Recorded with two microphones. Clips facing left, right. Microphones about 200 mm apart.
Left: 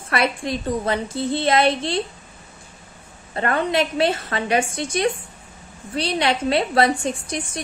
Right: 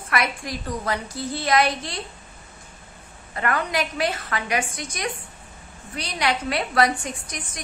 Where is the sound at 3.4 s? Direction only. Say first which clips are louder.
Left 4 dB; 25° left (ahead or behind).